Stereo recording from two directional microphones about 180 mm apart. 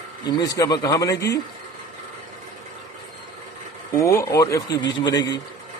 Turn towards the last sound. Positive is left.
turn(degrees=25)  # may be behind; listen again after turning